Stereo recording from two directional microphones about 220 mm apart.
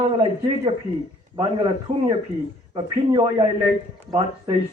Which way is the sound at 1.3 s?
20° right (ahead or behind).